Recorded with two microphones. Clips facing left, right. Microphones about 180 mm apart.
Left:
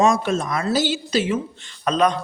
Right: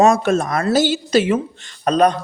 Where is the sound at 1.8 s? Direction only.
40° right (ahead or behind).